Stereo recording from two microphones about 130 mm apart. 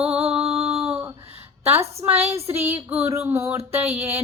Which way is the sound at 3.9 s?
55° right (ahead or behind).